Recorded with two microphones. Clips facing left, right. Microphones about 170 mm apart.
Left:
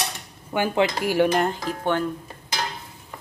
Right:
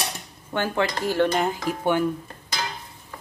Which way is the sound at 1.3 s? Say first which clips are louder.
Left 1 dB; 5° right (ahead or behind).